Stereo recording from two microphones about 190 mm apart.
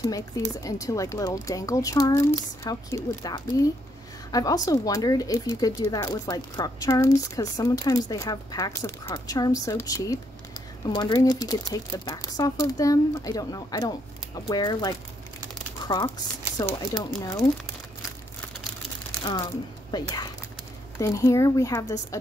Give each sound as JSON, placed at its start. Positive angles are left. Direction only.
{"t": 0.6, "sound": "a woman's voice", "side_deg": 20}
{"t": 19.2, "sound": "a woman's voice", "side_deg": 20}